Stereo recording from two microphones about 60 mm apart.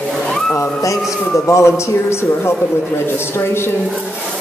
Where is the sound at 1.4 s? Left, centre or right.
Left.